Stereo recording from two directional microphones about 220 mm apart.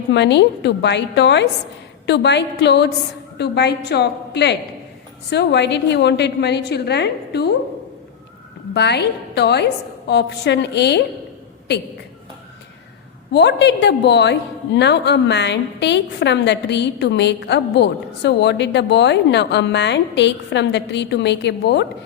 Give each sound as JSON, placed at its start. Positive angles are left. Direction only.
{"t": 0.1, "sound": "a woman's voice", "side_deg": 50}
{"t": 8.7, "sound": "a woman's voice", "side_deg": 50}
{"t": 13.3, "sound": "a woman's voice", "side_deg": 50}